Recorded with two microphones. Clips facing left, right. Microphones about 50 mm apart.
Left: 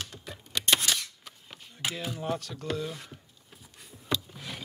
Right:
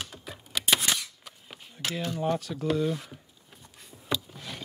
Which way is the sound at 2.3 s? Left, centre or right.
Centre.